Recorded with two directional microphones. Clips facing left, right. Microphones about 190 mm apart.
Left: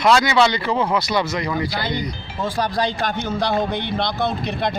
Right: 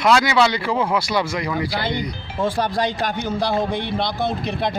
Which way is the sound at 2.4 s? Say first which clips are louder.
Right 1 dB; 25° right (ahead or behind).